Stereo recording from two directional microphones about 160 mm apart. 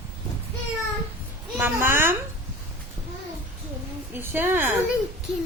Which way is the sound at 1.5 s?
15° right (ahead or behind).